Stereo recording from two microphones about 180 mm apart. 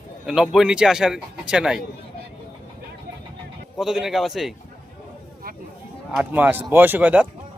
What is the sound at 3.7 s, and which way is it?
Speech, centre (ahead or behind).